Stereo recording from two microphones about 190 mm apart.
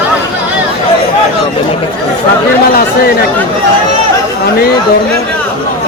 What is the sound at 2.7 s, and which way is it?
Speech, 50° left (ahead or behind).